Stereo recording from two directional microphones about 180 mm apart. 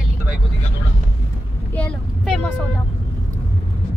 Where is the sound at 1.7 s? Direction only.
5° left (ahead or behind).